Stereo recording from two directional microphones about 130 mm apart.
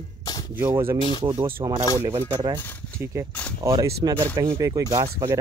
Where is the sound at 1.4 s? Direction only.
35° right (ahead or behind).